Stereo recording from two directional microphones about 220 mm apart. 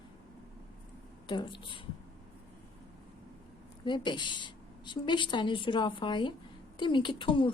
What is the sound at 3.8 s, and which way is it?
A woman's voice, 20° left (ahead or behind).